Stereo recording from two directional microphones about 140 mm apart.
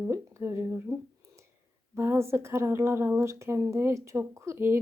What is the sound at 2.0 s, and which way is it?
Speech, 20° right (ahead or behind).